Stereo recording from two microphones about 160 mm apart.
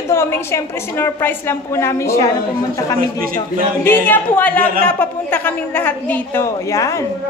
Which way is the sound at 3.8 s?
15° left (ahead or behind).